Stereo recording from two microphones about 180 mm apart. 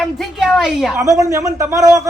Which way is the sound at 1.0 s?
20° right (ahead or behind).